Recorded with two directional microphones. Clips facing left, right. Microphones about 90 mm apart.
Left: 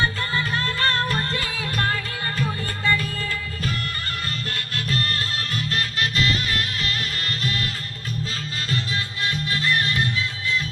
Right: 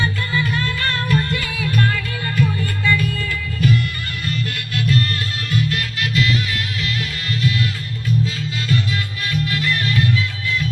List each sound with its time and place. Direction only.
0.0 s music: 35° left (ahead or behind)
9.2 s music: 25° left (ahead or behind)